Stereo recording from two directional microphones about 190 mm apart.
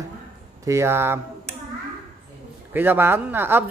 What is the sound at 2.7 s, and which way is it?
Speech, 10° right (ahead or behind).